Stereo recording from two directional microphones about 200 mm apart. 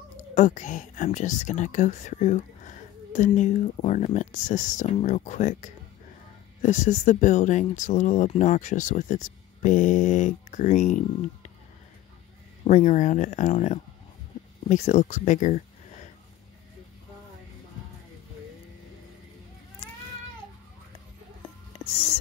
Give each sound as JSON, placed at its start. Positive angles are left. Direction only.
{"t": 0.3, "sound": "speech", "side_deg": 40}
{"t": 12.6, "sound": "speech", "side_deg": 35}
{"t": 21.7, "sound": "a sound", "side_deg": 30}